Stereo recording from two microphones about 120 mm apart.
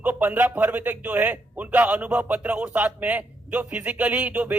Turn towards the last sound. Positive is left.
turn(degrees=-10)  # may be behind; listen again after turning